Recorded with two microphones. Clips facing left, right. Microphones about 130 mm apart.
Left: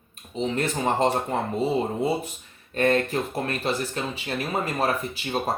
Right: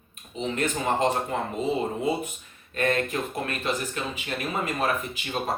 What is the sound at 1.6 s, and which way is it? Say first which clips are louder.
Speech: left 1 dB; 35° left (ahead or behind).